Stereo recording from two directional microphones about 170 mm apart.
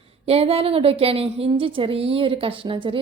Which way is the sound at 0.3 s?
35° right (ahead or behind).